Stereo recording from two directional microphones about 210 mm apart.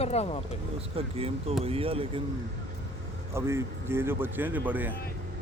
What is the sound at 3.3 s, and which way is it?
A man's voice, 10° right (ahead or behind).